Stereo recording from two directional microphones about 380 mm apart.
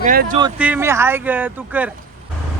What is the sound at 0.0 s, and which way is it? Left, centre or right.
Speech, right.